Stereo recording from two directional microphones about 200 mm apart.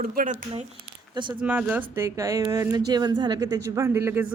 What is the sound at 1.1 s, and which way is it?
Speech, 25° right (ahead or behind).